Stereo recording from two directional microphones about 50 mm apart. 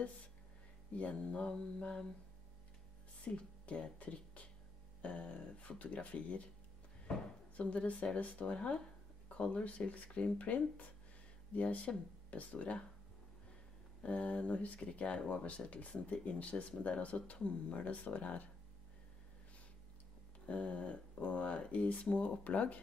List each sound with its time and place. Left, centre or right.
0.9 s speech: left
3.3 s speech: left
7.5 s speech: left
14.0 s speech: left
20.4 s speech: left